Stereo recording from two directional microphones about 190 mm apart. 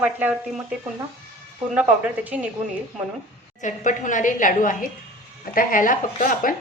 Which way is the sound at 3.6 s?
40° left (ahead or behind).